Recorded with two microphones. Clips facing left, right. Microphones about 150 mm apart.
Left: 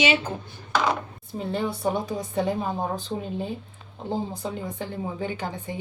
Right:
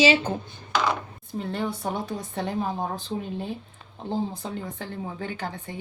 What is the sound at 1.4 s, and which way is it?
Speech, 5° left (ahead or behind).